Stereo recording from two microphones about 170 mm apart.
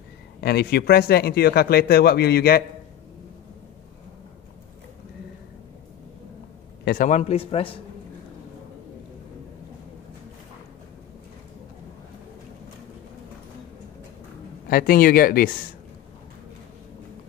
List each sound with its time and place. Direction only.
0.4 s speech: 70° left (ahead or behind)
6.8 s a man's voice: 55° left (ahead or behind); by 7.8 s 35° left (ahead or behind)
14.7 s speech: 60° left (ahead or behind)